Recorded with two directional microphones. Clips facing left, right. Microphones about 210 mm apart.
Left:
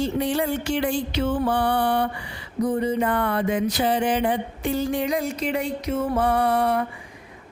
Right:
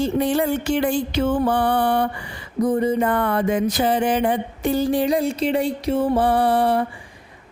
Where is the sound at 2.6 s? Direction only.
45° right (ahead or behind).